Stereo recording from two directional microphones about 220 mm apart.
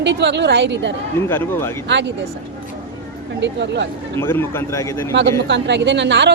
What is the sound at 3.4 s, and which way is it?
Speech, 50° right (ahead or behind).